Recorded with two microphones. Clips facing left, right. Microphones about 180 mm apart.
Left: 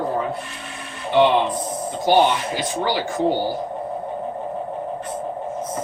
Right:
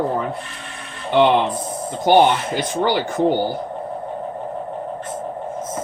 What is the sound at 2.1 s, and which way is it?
Speech, 55° right (ahead or behind).